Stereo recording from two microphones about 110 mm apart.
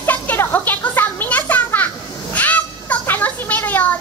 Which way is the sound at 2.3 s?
15° left (ahead or behind).